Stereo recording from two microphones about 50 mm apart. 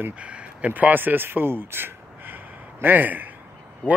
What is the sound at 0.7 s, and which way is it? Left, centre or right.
Speech, right.